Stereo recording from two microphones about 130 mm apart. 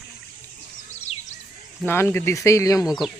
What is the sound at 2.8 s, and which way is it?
Speech, centre (ahead or behind).